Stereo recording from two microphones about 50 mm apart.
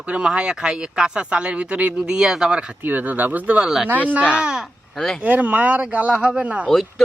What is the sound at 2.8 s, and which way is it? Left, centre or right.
Speech, right.